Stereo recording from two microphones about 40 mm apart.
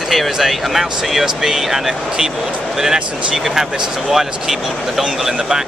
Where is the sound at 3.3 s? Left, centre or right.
Centre.